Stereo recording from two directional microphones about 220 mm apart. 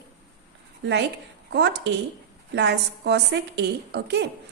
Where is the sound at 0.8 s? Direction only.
55° right (ahead or behind).